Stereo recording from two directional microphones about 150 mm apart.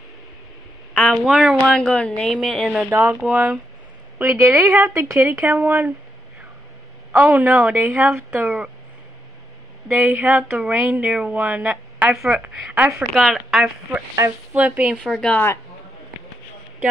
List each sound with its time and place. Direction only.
0.9 s speech: centre (ahead or behind)
1.7 s a woman's voice: 10° left (ahead or behind); by 5.9 s 15° right (ahead or behind)
7.1 s a woman's voice: 10° right (ahead or behind)
9.9 s a woman's voice: 15° right (ahead or behind)
13.1 s speech: centre (ahead or behind)
14.1 s a woman's voice: 15° right (ahead or behind)
15.0 s speech: 5° left (ahead or behind)